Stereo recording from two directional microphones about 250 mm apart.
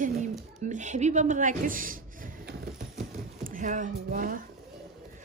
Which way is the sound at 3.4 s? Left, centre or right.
Right.